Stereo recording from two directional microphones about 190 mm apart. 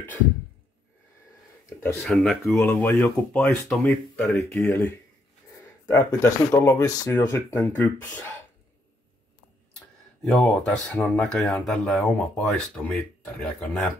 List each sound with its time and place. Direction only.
1.8 s speech: 5° left (ahead or behind)
4.6 s speech: 15° left (ahead or behind)
9.8 s speech: 5° left (ahead or behind)